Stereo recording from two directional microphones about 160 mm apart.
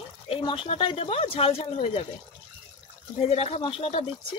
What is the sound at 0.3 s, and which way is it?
Speech, 30° left (ahead or behind).